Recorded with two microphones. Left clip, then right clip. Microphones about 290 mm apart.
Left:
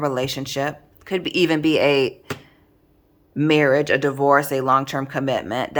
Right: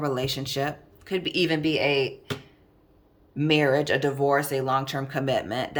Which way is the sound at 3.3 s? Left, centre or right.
Centre.